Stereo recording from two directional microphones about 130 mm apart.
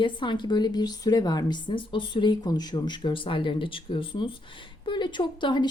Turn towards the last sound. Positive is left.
turn(degrees=35)  # may be behind; listen again after turning